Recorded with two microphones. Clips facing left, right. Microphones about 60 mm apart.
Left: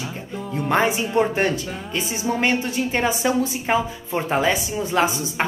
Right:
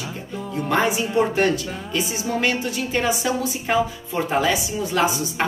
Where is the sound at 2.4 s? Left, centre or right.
Left.